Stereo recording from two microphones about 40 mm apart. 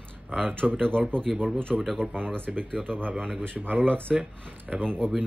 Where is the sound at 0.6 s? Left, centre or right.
Centre.